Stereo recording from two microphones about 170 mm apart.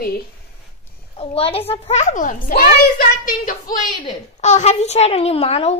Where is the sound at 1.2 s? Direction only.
35° left (ahead or behind); by 3.5 s 55° left (ahead or behind).